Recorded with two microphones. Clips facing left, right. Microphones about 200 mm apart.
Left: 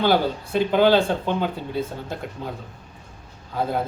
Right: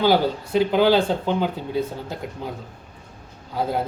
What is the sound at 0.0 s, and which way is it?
Speech, 10° right (ahead or behind).